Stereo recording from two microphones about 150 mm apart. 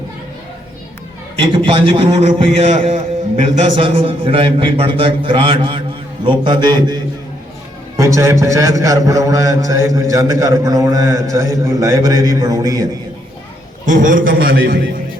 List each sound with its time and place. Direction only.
1.6 s a man's voice: 35° right (ahead or behind)
2.2 s a man's voice: 50° right (ahead or behind); by 6.9 s 30° right (ahead or behind)
8.0 s a man's voice: 20° right (ahead or behind)
13.8 s a man's voice: 60° right (ahead or behind); by 14.8 s 80° right